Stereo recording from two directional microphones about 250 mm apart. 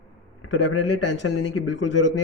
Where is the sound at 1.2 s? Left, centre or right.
Left.